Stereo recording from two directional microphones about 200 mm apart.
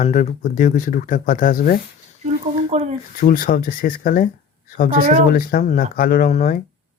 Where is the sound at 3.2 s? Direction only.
45° left (ahead or behind).